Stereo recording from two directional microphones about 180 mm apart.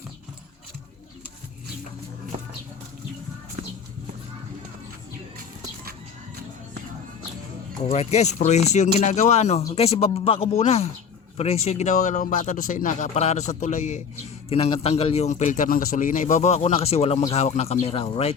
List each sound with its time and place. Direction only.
7.9 s a man's voice: 35° left (ahead or behind)